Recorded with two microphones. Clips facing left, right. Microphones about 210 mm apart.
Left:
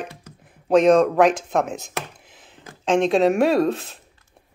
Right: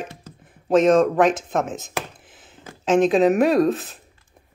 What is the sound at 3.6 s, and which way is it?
Speech, 35° right (ahead or behind).